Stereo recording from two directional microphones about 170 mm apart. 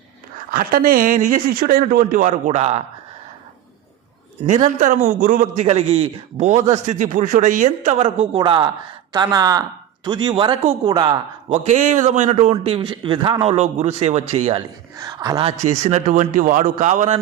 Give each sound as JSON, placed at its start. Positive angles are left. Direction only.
{"t": 0.5, "sound": "a man's voice", "side_deg": -60}
{"t": 4.4, "sound": "a man's voice", "side_deg": -45}
{"t": 11.5, "sound": "a man's voice", "side_deg": -45}
{"t": 14.9, "sound": "speech", "side_deg": -20}
{"t": 15.5, "sound": "a man's voice", "side_deg": -45}